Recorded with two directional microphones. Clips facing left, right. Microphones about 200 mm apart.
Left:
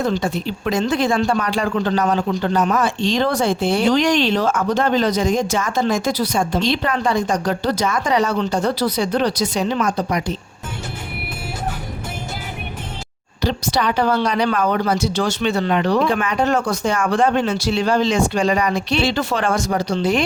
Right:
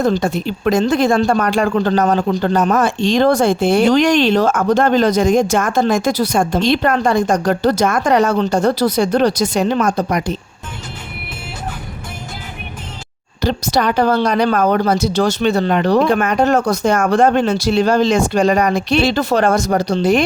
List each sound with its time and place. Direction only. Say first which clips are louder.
0.0 s speech: right 4 dB; 45° right (ahead or behind)
13.4 s speech: right 3 dB; 45° right (ahead or behind)